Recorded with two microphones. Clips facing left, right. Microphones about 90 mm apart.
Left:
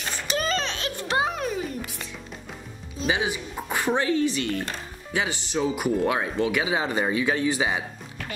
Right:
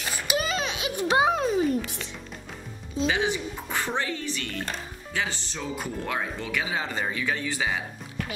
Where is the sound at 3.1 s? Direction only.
15° left (ahead or behind).